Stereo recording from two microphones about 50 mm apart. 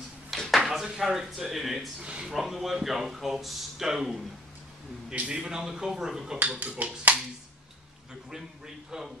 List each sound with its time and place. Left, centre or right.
0.5 s a sound: centre
0.8 s speech: centre
2.0 s speech: right
2.3 s speech: centre
5.3 s speech: centre
6.6 s speech: right
8.3 s speech: centre